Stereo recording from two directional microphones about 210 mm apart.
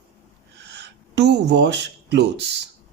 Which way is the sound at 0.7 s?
55° right (ahead or behind).